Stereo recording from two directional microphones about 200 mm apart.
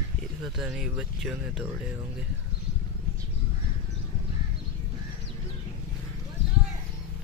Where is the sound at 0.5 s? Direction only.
5° right (ahead or behind).